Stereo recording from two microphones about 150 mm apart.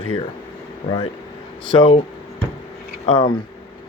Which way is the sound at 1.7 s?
35° left (ahead or behind).